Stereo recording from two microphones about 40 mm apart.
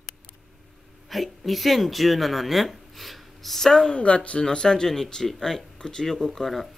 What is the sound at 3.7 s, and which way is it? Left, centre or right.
Speech, centre.